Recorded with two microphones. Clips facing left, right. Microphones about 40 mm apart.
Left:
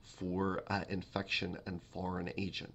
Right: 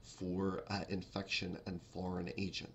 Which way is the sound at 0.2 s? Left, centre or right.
Left.